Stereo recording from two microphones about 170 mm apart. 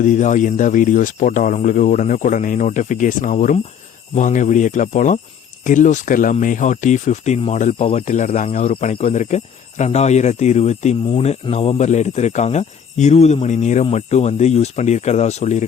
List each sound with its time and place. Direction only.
0.0 s speech: 50° left (ahead or behind)